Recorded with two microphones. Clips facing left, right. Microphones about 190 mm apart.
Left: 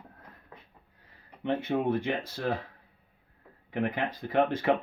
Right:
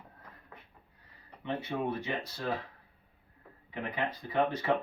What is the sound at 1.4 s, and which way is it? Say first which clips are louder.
Speech: left 6 dB; 85° left.